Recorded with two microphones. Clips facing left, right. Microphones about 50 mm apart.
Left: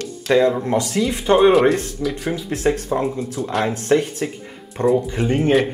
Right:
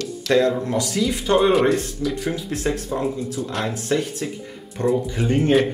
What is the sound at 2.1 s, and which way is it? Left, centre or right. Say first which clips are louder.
Speech: left 1 dB; centre.